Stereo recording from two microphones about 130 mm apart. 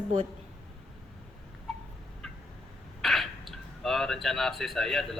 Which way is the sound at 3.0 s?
Centre (ahead or behind).